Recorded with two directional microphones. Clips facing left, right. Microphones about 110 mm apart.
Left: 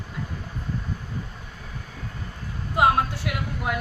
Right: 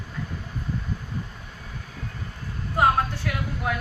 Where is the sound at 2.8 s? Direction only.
10° left (ahead or behind).